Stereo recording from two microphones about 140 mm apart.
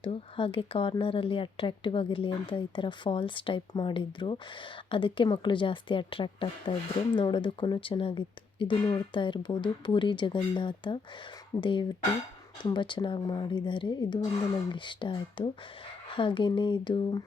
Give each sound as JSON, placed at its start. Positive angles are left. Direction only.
{"t": 0.0, "sound": "a woman's voice", "side_deg": 40}